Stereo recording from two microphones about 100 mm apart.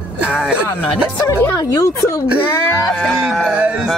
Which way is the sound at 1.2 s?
25° left (ahead or behind).